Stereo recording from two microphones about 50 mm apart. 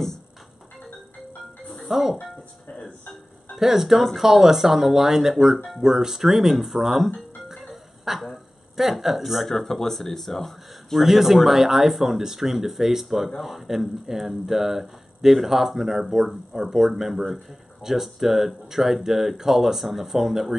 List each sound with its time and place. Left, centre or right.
1.7 s music: centre
2.7 s music: centre
3.5 s speech: centre
7.2 s music: centre
7.6 s speech: centre
11.1 s speech: centre